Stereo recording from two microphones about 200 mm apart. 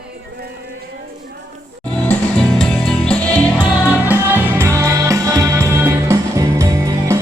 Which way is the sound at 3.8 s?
10° right (ahead or behind).